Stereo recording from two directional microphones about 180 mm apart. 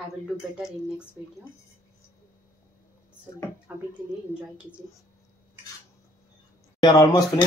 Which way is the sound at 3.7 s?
5° right (ahead or behind).